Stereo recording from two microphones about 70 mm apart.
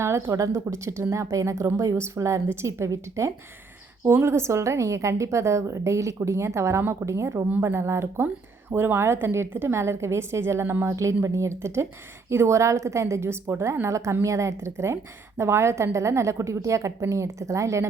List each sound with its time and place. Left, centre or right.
0.0 s a woman's voice: right